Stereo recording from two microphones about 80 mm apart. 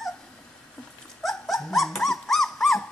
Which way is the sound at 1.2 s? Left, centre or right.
Centre.